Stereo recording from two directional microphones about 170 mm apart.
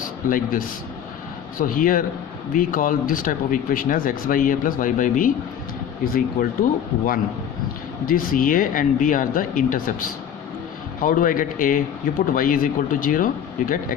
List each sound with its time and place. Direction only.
0.3 s a man's voice: 55° left (ahead or behind)
8.0 s speech: 55° left (ahead or behind)
11.0 s speech: 55° left (ahead or behind)